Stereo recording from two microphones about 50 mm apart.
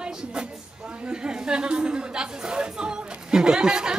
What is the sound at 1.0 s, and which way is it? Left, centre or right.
Chatter, centre.